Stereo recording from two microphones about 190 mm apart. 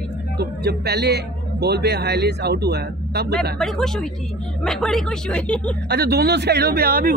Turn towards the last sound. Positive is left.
turn(degrees=-50)  # may be behind; listen again after turning